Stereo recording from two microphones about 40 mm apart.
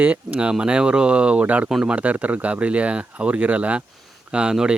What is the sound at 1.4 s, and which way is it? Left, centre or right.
Speech, right.